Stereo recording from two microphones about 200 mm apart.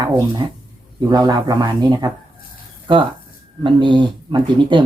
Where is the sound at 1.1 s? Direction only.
20° right (ahead or behind).